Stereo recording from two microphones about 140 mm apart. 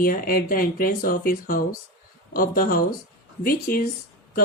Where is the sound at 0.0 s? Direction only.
90° left.